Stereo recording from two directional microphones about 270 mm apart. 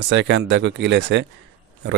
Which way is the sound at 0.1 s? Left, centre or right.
Right.